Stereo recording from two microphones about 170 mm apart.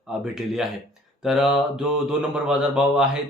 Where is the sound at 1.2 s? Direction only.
Centre (ahead or behind).